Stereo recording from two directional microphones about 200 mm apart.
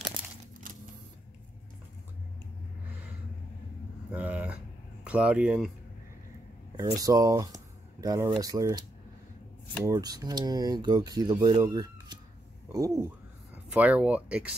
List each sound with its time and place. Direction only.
4.1 s speech: 10° right (ahead or behind)
6.8 s speech: 15° right (ahead or behind)
9.8 s speech: 15° right (ahead or behind)